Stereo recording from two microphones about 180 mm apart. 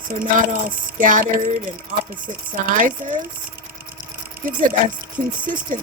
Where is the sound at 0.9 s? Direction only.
50° right (ahead or behind).